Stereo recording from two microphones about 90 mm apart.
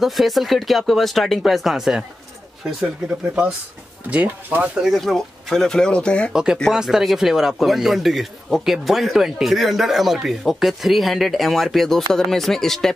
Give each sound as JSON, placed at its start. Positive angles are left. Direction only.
{"t": 0.0, "sound": "speech", "side_deg": 0}
{"t": 4.1, "sound": "speech", "side_deg": -15}
{"t": 4.8, "sound": "speech", "side_deg": 0}
{"t": 6.3, "sound": "speech", "side_deg": -5}